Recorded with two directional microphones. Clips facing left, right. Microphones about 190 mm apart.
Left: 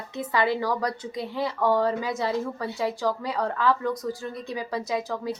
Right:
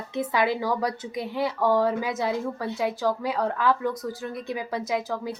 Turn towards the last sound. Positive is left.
turn(degrees=0)  # may be behind; listen again after turning